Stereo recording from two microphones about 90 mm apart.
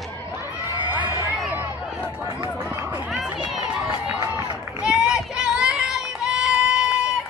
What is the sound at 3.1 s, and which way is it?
Run, 10° right (ahead or behind).